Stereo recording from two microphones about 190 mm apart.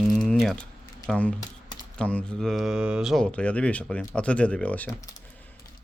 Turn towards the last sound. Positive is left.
turn(degrees=5)  # may be behind; listen again after turning